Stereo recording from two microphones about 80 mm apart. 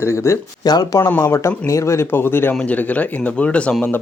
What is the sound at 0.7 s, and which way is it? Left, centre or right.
Speech, left.